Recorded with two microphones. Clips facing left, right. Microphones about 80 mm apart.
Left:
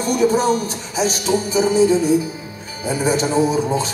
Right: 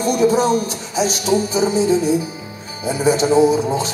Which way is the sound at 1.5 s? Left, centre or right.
Right.